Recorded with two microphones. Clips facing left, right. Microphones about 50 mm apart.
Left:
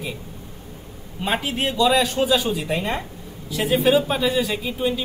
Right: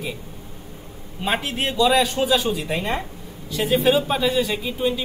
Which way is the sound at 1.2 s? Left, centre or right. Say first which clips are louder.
Even; centre.